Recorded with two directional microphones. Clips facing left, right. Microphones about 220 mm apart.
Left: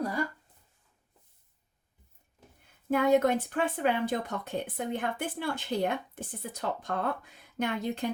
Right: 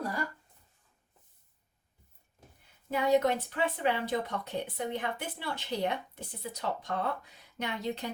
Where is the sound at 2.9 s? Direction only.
50° left (ahead or behind).